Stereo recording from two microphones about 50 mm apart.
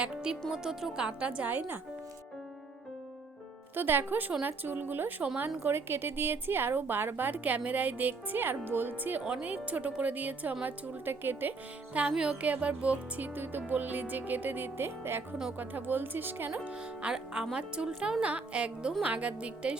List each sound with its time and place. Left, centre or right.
0.0 s speech: centre
1.0 s speech: right
1.5 s music: right
3.8 s music: right
5.6 s a woman's voice: right
9.2 s speech: right
10.7 s music: right
12.1 s music: centre; by 15.2 s right
15.5 s music: right
16.5 s speech: right